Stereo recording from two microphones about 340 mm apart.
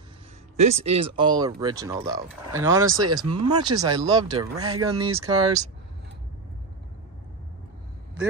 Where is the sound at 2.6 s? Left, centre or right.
Right.